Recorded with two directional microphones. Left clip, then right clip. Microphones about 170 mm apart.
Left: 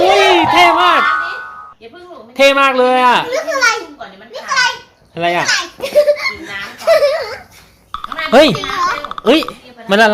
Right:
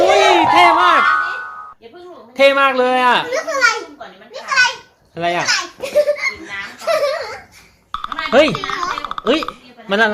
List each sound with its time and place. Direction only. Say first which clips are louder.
0.0 s music: left 2 dB; centre (ahead or behind)
2.3 s a child's voice: left 2 dB; centre (ahead or behind)
5.1 s a child's voice: left 3 dB; 5° left (ahead or behind)
5.8 s a sound: left 5 dB; 15° left (ahead or behind)
6.7 s giggle: left 6 dB; 25° left (ahead or behind)
7.9 s music: even; centre (ahead or behind)
8.3 s speech: left 4 dB; 15° left (ahead or behind)
8.6 s a sound: left 4 dB; centre (ahead or behind)
9.2 s speech: left 6 dB; 15° left (ahead or behind)